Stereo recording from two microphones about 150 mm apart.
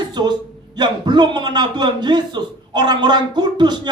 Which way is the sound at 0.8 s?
30° right (ahead or behind).